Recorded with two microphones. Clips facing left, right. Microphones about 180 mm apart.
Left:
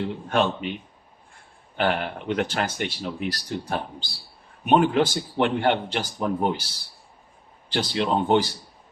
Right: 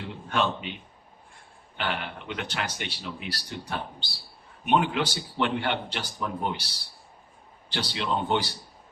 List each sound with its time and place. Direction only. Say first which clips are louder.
0.3 s speech: left 3 dB; 45° left (ahead or behind)
1.7 s speech: left 8 dB; 45° left (ahead or behind)
7.7 s speech: left 6 dB; 45° left (ahead or behind)